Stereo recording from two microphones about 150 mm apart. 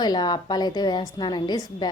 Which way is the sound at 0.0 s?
30° left (ahead or behind).